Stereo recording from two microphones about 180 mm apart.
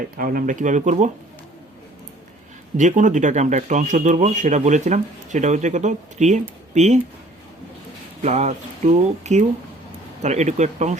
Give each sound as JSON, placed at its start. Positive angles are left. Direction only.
{"t": 0.2, "sound": "speech", "side_deg": -50}
{"t": 2.7, "sound": "speech", "side_deg": -45}
{"t": 8.2, "sound": "speech", "side_deg": -40}